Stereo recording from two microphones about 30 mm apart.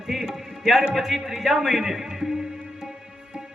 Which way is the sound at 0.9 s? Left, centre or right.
Centre.